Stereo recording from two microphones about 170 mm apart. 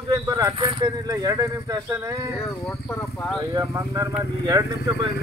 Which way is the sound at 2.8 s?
5° left (ahead or behind).